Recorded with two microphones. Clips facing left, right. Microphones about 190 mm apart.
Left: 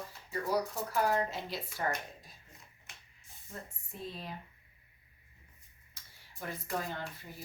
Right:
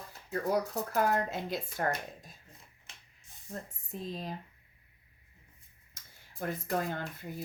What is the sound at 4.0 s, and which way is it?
Speech, 40° right (ahead or behind).